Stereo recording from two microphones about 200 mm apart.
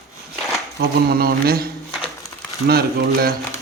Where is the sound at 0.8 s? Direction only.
50° right (ahead or behind).